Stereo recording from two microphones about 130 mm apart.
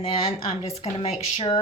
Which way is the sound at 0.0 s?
55° left (ahead or behind).